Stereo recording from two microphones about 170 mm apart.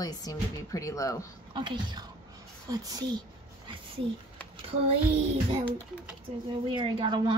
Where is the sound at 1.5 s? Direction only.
25° right (ahead or behind).